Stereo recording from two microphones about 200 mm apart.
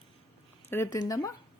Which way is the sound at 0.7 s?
15° left (ahead or behind).